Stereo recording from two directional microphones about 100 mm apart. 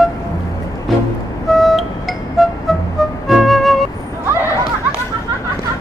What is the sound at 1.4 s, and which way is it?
Music, centre (ahead or behind).